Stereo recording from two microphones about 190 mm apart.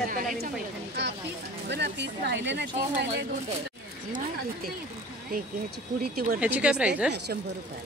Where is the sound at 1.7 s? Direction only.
65° right (ahead or behind).